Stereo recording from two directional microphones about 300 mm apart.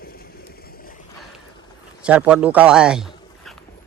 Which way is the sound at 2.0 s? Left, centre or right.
Centre.